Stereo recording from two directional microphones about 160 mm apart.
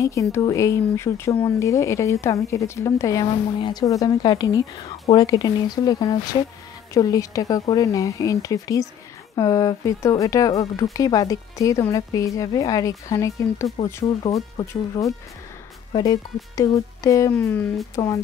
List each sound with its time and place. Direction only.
0.0 s speech: 20° left (ahead or behind)